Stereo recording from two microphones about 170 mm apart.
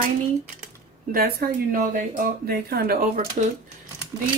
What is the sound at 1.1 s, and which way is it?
Speech, 65° right (ahead or behind).